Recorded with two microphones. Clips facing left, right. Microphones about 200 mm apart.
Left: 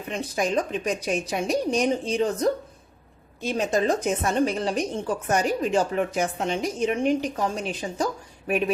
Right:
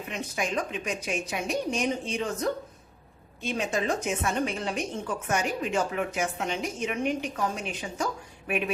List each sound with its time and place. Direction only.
0.1 s a woman's voice: 35° left (ahead or behind)